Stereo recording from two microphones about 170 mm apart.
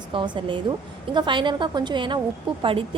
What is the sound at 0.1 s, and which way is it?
A woman's voice, 30° right (ahead or behind).